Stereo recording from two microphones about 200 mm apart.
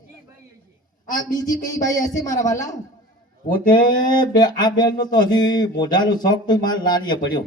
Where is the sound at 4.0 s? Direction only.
20° left (ahead or behind).